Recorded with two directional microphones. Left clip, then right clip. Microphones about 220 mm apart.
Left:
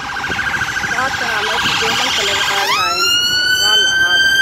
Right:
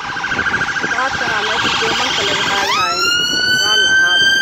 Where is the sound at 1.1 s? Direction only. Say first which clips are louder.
Even; 45° left (ahead or behind).